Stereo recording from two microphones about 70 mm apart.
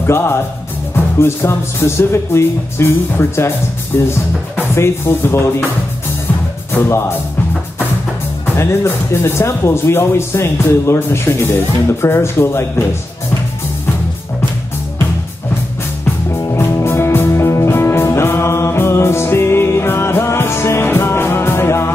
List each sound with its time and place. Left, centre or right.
0.0 s speech: left
6.7 s speech: left
8.5 s speech: left
16.3 s music: left